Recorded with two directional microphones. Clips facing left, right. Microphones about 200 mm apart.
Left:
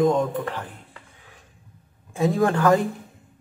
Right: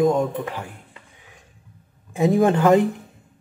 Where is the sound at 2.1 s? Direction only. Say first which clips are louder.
Right 3 dB; 20° right (ahead or behind).